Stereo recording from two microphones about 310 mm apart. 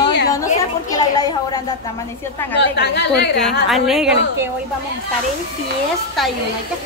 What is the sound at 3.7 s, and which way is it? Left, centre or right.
Speech, centre.